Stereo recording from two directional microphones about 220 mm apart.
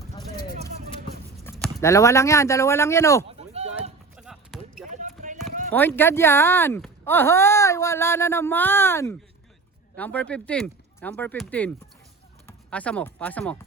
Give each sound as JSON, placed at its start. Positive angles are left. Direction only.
{"t": 1.5, "sound": "a sound", "side_deg": 0}
{"t": 1.8, "sound": "speech", "side_deg": 15}
{"t": 3.2, "sound": "a sound", "side_deg": -30}
{"t": 4.2, "sound": "basketball bounce", "side_deg": 0}
{"t": 4.9, "sound": "basketball bounce", "side_deg": -35}
{"t": 5.7, "sound": "speech", "side_deg": 10}